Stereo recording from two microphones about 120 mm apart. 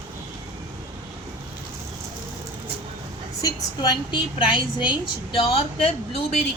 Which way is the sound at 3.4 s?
35° left (ahead or behind).